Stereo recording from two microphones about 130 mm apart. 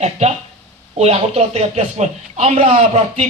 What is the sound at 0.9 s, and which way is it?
A man's voice, 50° right (ahead or behind).